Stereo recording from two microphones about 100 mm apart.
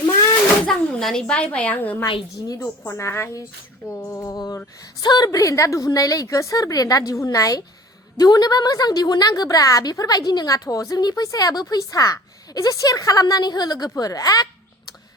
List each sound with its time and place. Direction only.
0.7 s a child's voice: 5° left (ahead or behind); by 14.4 s 35° left (ahead or behind)